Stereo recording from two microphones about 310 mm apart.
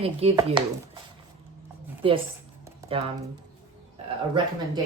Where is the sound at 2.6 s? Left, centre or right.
Centre.